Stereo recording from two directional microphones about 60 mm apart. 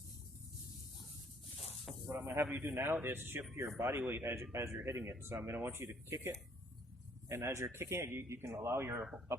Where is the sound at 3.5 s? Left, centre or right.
Right.